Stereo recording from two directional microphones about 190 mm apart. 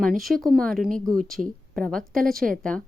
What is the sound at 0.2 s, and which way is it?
A woman's voice, centre (ahead or behind).